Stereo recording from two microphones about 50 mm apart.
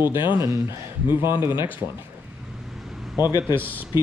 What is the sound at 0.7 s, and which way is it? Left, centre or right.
Speech, right.